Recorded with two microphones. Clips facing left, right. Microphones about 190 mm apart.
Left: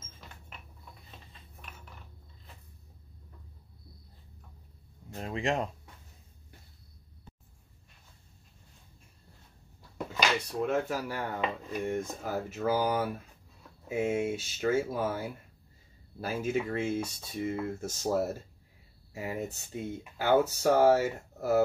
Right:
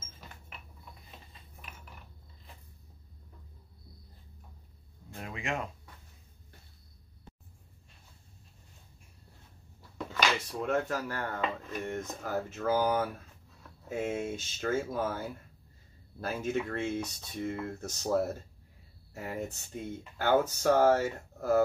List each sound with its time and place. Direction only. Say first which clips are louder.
5.1 s speech: left 5 dB; 30° left (ahead or behind)
9.9 s speech: left 1 dB; 10° left (ahead or behind)